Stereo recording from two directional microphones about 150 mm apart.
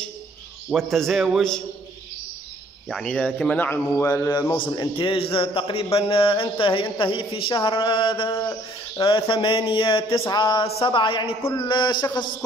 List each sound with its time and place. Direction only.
0.7 s a man's voice: centre (ahead or behind)
2.9 s a man's voice: 5° left (ahead or behind); by 8.3 s 35° left (ahead or behind)
8.3 s a sound: 20° left (ahead or behind)
9.0 s a man's voice: 35° left (ahead or behind)